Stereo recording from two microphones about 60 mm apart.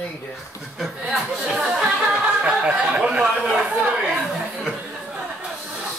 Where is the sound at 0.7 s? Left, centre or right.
Centre.